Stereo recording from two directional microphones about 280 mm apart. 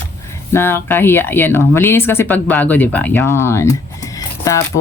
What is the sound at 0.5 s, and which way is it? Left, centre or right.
Speech, centre.